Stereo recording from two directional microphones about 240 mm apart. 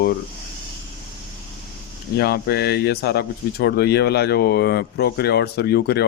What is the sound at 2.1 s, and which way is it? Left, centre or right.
Speech, left.